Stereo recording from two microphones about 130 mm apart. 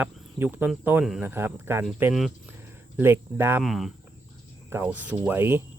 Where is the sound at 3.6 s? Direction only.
Centre (ahead or behind).